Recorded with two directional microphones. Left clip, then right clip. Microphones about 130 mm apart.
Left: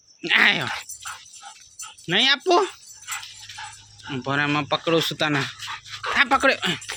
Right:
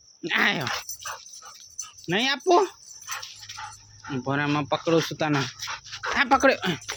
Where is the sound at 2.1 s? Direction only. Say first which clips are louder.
Left 3 dB; 15° right (ahead or behind).